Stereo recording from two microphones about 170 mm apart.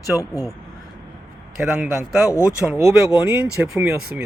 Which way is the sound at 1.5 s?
5° right (ahead or behind).